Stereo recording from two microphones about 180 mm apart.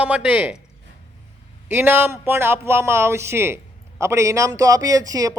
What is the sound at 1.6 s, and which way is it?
A man's voice, 10° right (ahead or behind).